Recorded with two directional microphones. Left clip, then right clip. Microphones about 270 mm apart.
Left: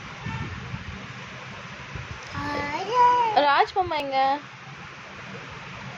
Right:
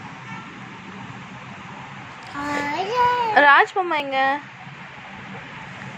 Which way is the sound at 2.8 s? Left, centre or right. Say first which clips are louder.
Left 1 dB; centre.